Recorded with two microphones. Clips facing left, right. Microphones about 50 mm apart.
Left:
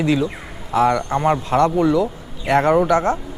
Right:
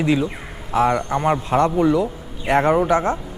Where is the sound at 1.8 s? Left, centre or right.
Right.